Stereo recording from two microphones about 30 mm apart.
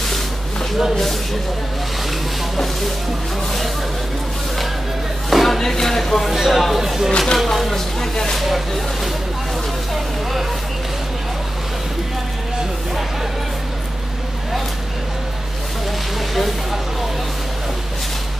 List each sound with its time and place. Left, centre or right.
5.3 s a sound: centre
5.6 s speech: centre
6.3 s speech: centre
7.1 s speech: left
7.7 s a sound: centre
8.4 s speech: centre
16.3 s vehicle: centre